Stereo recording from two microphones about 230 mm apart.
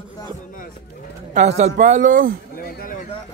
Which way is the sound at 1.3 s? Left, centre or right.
Right.